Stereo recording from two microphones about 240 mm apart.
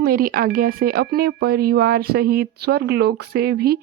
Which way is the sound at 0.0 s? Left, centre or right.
Right.